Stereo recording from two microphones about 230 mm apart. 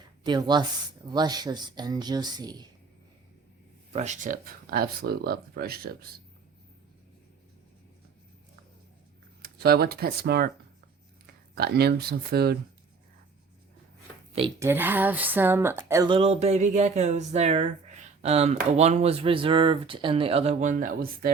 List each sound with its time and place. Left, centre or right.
0.3 s speech: centre
3.9 s speech: right
9.4 s speech: right
11.5 s speech: right
14.6 s speech: centre; by 21.2 s right